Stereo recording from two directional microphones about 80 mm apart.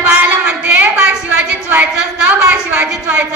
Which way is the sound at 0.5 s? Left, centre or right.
Centre.